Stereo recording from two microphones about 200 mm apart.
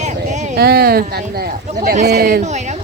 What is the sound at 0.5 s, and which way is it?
Speech, 50° right (ahead or behind).